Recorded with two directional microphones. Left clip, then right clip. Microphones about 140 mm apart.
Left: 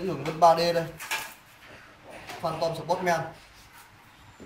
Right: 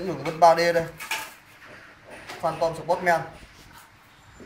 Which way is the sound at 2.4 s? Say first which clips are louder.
Right 4 dB; 15° right (ahead or behind).